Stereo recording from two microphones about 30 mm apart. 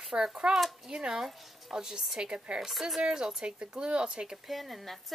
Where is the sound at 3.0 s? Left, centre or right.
Right.